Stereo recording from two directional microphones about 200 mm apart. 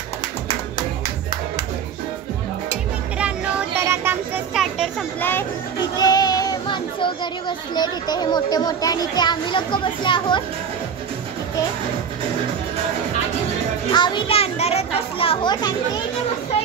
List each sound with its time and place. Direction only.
3.2 s music: 5° right (ahead or behind)
5.9 s speech: 20° left (ahead or behind)
13.9 s children playing: 25° left (ahead or behind)